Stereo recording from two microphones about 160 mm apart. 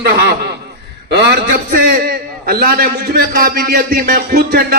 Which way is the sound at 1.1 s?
90° right.